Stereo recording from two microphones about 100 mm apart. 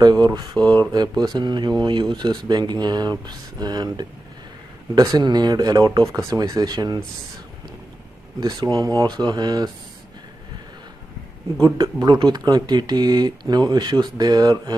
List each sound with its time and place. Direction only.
0.0 s speech: 40° right (ahead or behind)
8.4 s speech: 45° right (ahead or behind)
11.6 s speech: 45° right (ahead or behind)